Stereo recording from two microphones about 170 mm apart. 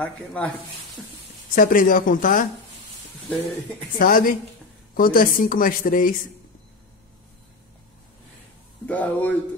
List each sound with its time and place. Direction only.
0.0 s speech: 5° left (ahead or behind)
1.5 s speech: 55° left (ahead or behind)
4.0 s speech: 55° left (ahead or behind)
8.8 s speech: 10° left (ahead or behind)